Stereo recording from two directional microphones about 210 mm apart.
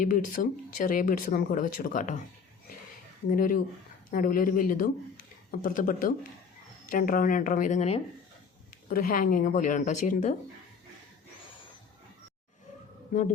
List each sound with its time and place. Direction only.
0.4 s speech: 40° left (ahead or behind)
3.2 s speech: 40° left (ahead or behind)
8.9 s speech: 40° left (ahead or behind)
13.1 s speech: 40° left (ahead or behind)